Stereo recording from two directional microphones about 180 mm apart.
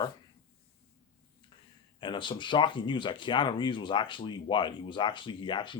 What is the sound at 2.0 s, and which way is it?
Speech, 25° left (ahead or behind).